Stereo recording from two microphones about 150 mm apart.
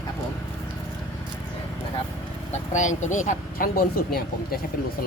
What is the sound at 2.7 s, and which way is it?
Speech, 55° left (ahead or behind).